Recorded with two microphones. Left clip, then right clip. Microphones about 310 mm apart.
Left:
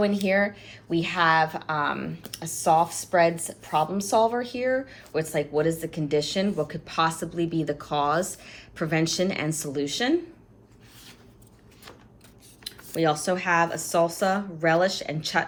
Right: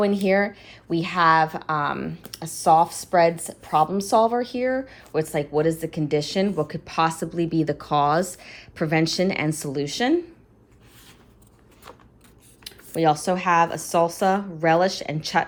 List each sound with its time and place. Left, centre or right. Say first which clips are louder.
0.0 s a woman's voice: right 3 dB; right
12.6 s a woman's voice: right 4 dB; centre